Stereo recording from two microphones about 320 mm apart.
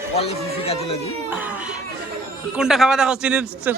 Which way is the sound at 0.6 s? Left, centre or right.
Centre.